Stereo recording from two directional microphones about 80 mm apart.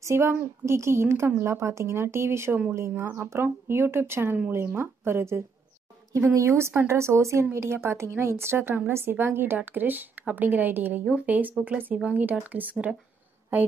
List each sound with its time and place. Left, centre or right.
0.0 s a woman's voice: right